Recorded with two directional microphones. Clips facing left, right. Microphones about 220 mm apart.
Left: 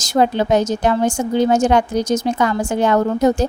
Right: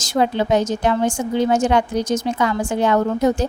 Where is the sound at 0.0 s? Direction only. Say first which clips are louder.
Left 2 dB; 40° left (ahead or behind).